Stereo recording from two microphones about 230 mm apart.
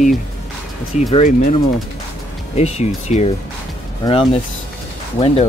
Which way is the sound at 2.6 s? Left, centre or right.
Left.